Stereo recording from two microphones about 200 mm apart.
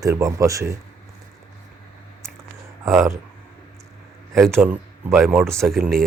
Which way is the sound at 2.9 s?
15° right (ahead or behind).